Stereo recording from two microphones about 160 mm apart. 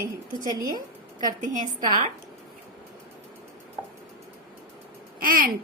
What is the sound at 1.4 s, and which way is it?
Speech, 50° right (ahead or behind).